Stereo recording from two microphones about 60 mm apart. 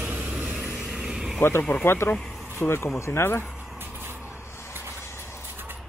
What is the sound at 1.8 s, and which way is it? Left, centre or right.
Speech, left.